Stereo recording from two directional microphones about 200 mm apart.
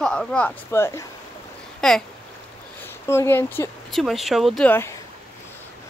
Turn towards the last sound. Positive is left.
turn(degrees=10)  # may be behind; listen again after turning